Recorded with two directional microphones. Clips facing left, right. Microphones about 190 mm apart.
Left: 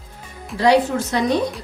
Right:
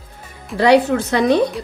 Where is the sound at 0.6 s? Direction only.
60° right (ahead or behind).